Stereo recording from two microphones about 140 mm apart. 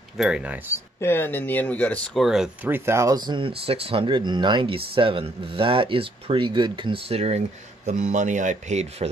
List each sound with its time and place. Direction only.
0.2 s speech: 5° right (ahead or behind)
1.0 s speech: 15° left (ahead or behind)
2.2 s speech: 5° right (ahead or behind)
2.7 s speech: 20° right (ahead or behind); by 9.1 s 55° right (ahead or behind)